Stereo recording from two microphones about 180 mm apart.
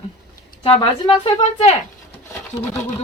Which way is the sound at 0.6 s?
30° left (ahead or behind).